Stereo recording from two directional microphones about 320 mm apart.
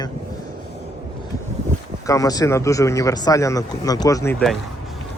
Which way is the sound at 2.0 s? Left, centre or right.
Centre.